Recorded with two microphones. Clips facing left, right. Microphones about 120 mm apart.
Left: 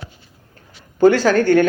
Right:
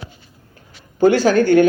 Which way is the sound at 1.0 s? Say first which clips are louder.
Even; 15° right (ahead or behind).